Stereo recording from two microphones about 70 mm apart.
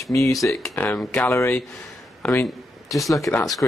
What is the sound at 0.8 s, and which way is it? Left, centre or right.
Speech, left.